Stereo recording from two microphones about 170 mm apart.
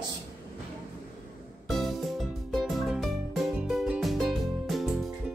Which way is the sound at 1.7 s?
Centre (ahead or behind).